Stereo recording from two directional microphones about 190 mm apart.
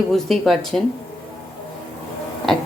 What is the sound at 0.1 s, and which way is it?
Speech, centre (ahead or behind).